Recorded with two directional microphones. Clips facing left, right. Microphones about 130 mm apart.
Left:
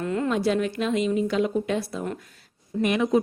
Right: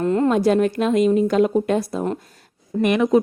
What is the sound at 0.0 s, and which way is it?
A woman's voice, 40° right (ahead or behind).